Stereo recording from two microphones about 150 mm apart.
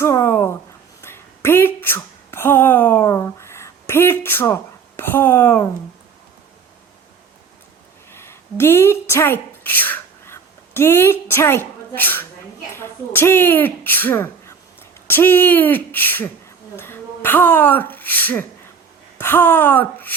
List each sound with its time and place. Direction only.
0.0 s speech: 15° left (ahead or behind)
8.1 s speech: 15° left (ahead or behind)